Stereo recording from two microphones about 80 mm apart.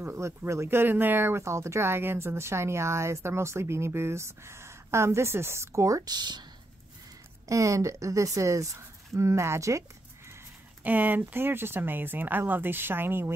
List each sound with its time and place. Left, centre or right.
0.0 s speech: right
6.0 s speech: right
7.4 s speech: right
10.8 s speech: right